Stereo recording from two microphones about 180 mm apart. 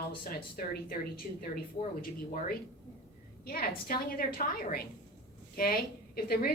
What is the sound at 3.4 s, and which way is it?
A woman's voice, 55° left (ahead or behind).